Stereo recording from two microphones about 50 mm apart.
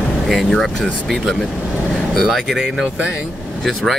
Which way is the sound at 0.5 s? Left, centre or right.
Centre.